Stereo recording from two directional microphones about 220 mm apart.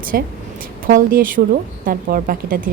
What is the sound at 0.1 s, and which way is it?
A woman's voice, 45° right (ahead or behind).